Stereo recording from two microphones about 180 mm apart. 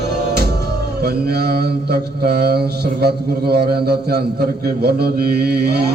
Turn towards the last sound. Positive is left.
turn(degrees=-60)  # may be behind; listen again after turning